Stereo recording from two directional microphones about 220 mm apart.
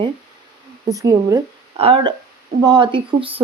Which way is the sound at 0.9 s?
15° right (ahead or behind).